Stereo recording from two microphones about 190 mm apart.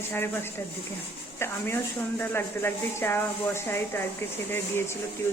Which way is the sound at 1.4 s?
15° left (ahead or behind).